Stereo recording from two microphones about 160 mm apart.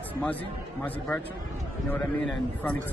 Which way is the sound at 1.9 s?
10° left (ahead or behind).